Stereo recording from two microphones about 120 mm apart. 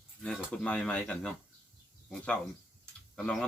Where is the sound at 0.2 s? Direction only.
5° left (ahead or behind).